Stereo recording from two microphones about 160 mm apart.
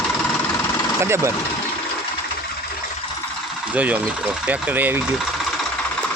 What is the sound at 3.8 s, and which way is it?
Speech, 10° right (ahead or behind).